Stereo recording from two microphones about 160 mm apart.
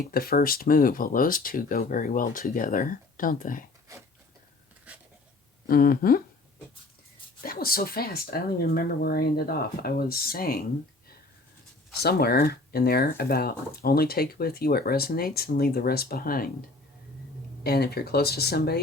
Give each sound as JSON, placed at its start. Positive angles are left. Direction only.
{"t": 0.1, "sound": "speech", "side_deg": 65}
{"t": 4.9, "sound": "a sound", "side_deg": -10}
{"t": 5.6, "sound": "speech", "side_deg": 65}
{"t": 7.4, "sound": "speech", "side_deg": 65}
{"t": 11.9, "sound": "speech", "side_deg": 75}
{"t": 17.6, "sound": "speech", "side_deg": 80}